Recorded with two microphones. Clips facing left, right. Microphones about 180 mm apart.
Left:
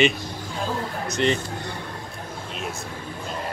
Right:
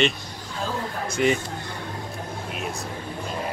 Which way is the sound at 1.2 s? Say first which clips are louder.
Right 1 dB; 5° right (ahead or behind).